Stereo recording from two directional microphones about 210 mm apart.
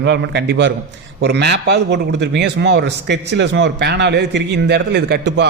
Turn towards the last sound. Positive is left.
turn(degrees=-55)  # may be behind; listen again after turning